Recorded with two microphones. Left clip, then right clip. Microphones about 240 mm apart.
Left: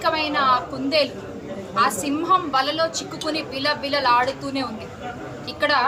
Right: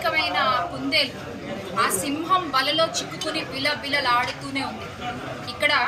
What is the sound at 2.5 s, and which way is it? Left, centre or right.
A woman's voice, centre.